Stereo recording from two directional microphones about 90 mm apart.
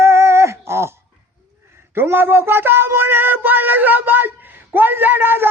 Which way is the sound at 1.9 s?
25° right (ahead or behind).